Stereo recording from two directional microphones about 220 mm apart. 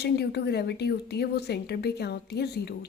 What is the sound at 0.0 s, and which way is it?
A woman's voice, 50° left (ahead or behind).